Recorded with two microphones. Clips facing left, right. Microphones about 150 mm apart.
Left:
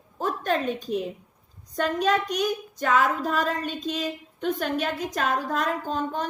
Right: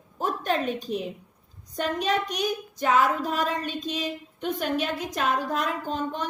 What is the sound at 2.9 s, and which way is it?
A woman's voice, 50° left (ahead or behind).